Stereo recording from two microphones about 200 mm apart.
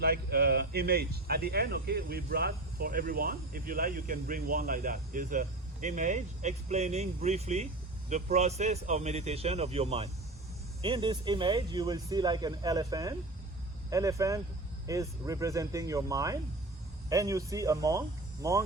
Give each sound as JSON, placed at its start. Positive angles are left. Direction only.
{"t": 0.0, "sound": "a man's voice", "side_deg": -50}